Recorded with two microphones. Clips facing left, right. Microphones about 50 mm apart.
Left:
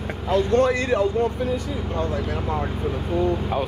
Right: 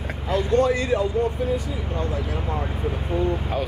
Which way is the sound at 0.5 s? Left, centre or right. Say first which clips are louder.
Right 1 dB; left.